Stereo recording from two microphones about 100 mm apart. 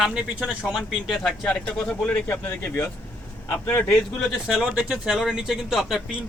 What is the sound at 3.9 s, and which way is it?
Speech, centre (ahead or behind).